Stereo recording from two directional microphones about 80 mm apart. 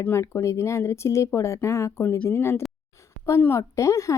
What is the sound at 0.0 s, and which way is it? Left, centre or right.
Speech, left.